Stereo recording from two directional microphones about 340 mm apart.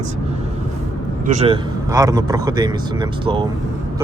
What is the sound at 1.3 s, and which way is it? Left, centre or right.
Speech, centre.